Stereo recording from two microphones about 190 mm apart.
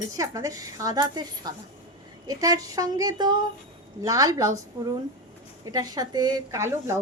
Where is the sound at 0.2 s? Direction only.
20° right (ahead or behind).